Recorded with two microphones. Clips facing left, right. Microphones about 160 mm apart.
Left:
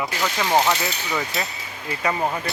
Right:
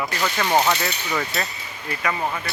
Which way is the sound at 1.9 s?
25° left (ahead or behind).